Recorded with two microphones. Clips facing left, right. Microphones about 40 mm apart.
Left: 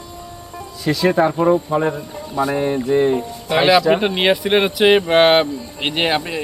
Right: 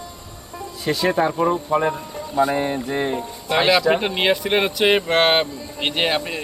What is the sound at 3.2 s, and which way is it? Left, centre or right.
A man's voice, centre.